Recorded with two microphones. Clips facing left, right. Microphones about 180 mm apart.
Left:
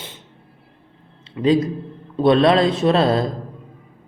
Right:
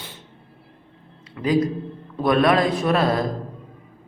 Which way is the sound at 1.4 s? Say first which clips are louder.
Left 3 dB; 20° left (ahead or behind).